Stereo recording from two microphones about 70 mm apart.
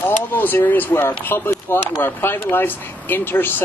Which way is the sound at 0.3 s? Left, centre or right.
Left.